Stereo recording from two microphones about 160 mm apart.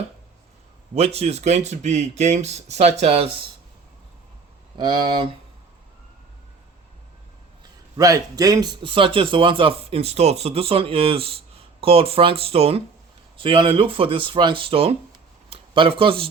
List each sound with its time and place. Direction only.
0.9 s a man's voice: 40° right (ahead or behind)
4.8 s speech: 25° right (ahead or behind)
7.9 s a man's voice: 20° right (ahead or behind)